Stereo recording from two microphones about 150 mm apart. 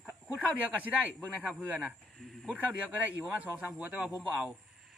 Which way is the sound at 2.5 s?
10° right (ahead or behind).